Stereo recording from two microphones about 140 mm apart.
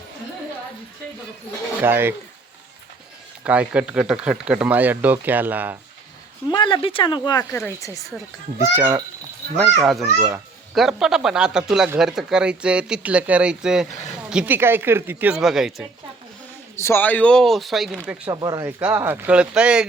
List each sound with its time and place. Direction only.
1.8 s speech: 15° right (ahead or behind)
3.4 s speech: 10° right (ahead or behind)
6.5 s speech: 35° left (ahead or behind)
7.5 s speech: 20° left (ahead or behind)
8.5 s speech: 15° right (ahead or behind)
9.8 s speech: centre (ahead or behind)
15.4 s speech: centre (ahead or behind)
16.7 s a man's voice: 20° left (ahead or behind); by 17.9 s centre (ahead or behind)
18.3 s speech: 25° right (ahead or behind)
18.8 s speech: 15° right (ahead or behind)